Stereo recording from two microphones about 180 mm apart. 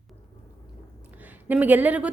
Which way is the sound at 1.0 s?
10° right (ahead or behind).